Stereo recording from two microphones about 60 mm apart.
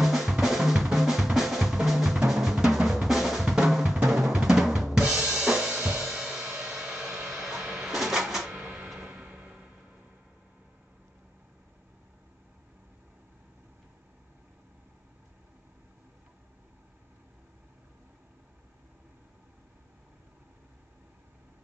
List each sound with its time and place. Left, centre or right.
0.0 s drum: centre
4.1 s drum kit: centre
5.9 s music: centre
8.5 s printer: centre
9.0 s music: right